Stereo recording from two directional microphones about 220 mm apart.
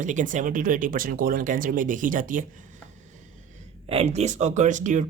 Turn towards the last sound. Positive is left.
turn(degrees=-35)  # may be behind; listen again after turning